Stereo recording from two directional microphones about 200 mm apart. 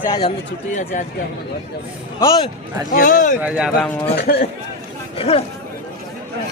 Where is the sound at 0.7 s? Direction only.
40° left (ahead or behind).